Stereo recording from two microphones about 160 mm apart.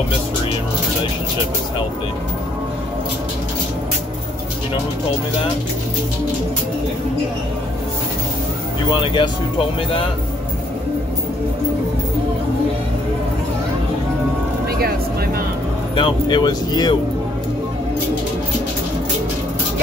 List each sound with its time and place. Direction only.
8.9 s speech: 30° left (ahead or behind)
14.8 s a sound: 70° right (ahead or behind)
16.0 s speech: 30° left (ahead or behind)